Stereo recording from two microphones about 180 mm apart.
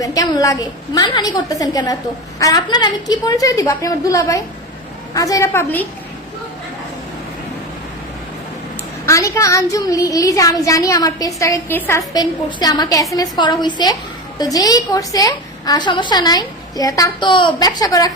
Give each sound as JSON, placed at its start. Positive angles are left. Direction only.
{"t": 0.0, "sound": "a woman's voice", "side_deg": 20}
{"t": 9.0, "sound": "speech", "side_deg": 15}